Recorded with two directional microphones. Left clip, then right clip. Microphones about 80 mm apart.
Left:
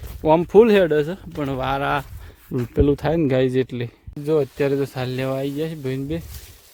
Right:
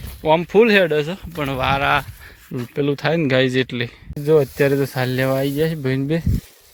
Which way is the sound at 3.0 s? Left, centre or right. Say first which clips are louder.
Right 2 dB; left.